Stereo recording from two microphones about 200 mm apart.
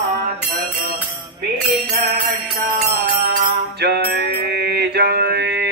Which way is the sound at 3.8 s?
55° right (ahead or behind).